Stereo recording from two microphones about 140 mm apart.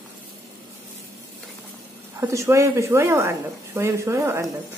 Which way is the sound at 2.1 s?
20° right (ahead or behind).